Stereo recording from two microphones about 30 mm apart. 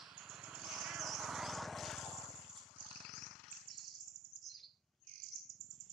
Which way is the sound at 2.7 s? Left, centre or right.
Left.